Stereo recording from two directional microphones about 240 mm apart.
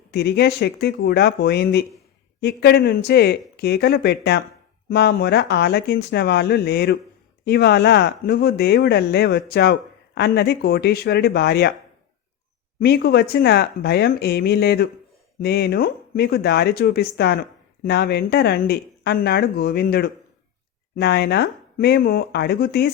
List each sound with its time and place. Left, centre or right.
0.1 s speech: left
12.8 s speech: left